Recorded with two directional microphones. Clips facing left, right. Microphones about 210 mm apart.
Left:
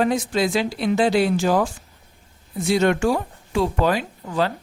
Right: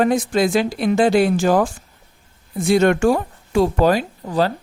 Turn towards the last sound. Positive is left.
turn(degrees=-35)  # may be behind; listen again after turning